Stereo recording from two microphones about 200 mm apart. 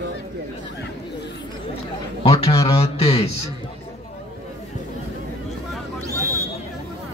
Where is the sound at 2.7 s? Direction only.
30° left (ahead or behind).